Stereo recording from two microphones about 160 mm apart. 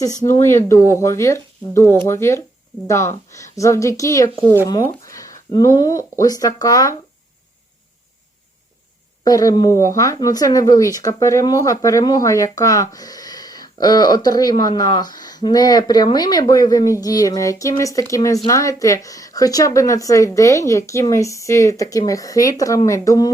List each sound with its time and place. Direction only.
0.9 s speech: 15° left (ahead or behind)
9.2 s speech: 20° left (ahead or behind)